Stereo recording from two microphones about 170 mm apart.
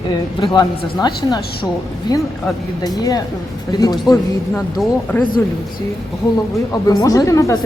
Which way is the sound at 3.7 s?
25° left (ahead or behind).